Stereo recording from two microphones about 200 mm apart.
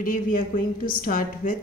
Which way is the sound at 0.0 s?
40° left (ahead or behind).